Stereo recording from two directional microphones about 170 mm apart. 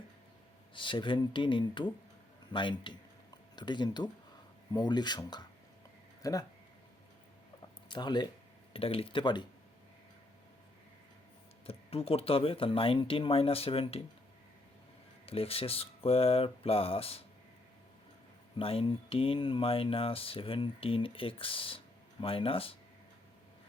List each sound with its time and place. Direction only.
0.7 s speech: 30° left (ahead or behind)
7.9 s speech: 25° left (ahead or behind)
11.6 s speech: 35° left (ahead or behind)
15.3 s speech: 35° left (ahead or behind)
18.5 s speech: 35° left (ahead or behind)